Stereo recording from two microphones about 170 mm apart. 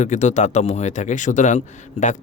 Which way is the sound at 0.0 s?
45° left (ahead or behind).